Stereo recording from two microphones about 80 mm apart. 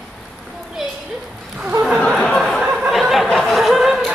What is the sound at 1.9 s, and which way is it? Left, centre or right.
Chatter, centre.